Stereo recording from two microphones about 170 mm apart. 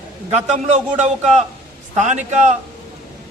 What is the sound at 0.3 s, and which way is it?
Speech, 40° right (ahead or behind).